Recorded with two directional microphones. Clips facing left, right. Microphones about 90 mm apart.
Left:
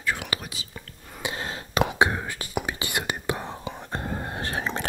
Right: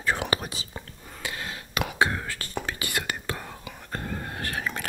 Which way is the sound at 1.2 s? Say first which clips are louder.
Left 4 dB; 20° left (ahead or behind).